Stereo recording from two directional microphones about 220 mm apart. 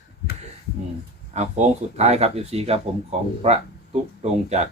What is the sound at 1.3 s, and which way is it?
Speech, 30° right (ahead or behind).